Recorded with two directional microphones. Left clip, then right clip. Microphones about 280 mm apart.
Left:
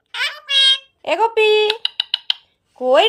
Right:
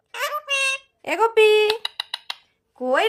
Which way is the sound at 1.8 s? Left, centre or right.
Right.